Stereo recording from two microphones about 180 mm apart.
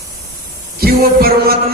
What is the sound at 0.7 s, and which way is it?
Music, 55° right (ahead or behind).